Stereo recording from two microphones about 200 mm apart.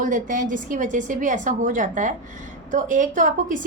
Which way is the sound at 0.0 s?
40° right (ahead or behind).